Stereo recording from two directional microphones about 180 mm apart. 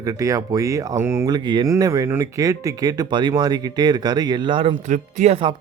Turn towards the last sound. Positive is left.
turn(degrees=-40)  # may be behind; listen again after turning